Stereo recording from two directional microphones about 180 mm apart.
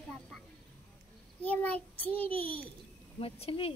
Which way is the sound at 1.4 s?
10° left (ahead or behind).